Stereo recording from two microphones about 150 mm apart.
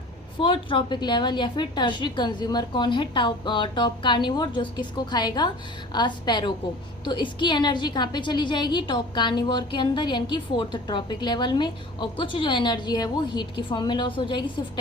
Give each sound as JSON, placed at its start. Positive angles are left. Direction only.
{"t": 0.3, "sound": "a woman's voice", "side_deg": 35}